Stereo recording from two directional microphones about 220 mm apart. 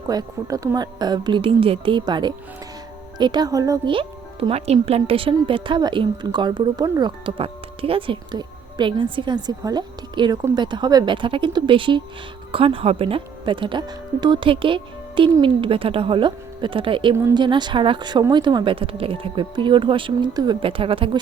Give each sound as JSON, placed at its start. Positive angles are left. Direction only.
{"t": 0.1, "sound": "speech", "side_deg": -15}